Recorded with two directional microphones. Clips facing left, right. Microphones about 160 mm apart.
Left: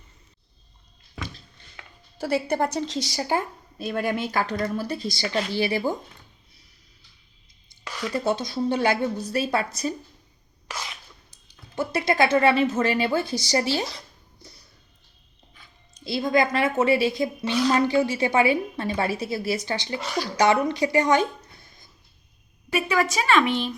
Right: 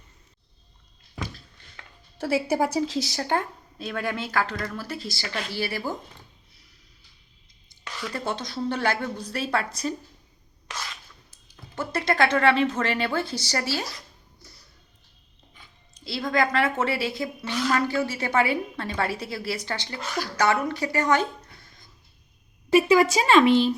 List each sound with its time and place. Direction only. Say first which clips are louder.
2.1 s speech: even; centre (ahead or behind); by 6.0 s 20° left (ahead or behind)
8.1 s a woman's voice: left 6 dB; 10° left (ahead or behind)
10.7 s a sound: left 1 dB; 15° left (ahead or behind)
11.7 s a woman's voice: left 2 dB; 10° left (ahead or behind)
16.0 s a woman's voice: left 3 dB; 15° left (ahead or behind)
22.7 s a woman's voice: right 6 dB; 30° right (ahead or behind)